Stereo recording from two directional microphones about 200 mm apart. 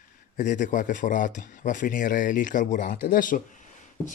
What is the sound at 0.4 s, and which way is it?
Speech, 40° left (ahead or behind).